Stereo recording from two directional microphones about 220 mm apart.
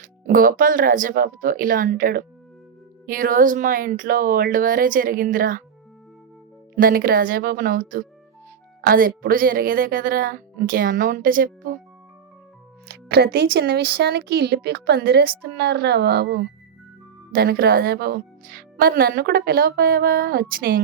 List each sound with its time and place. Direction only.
0.0 s speech: 40° right (ahead or behind)
6.7 s speech: 40° right (ahead or behind)
12.9 s speech: 45° right (ahead or behind)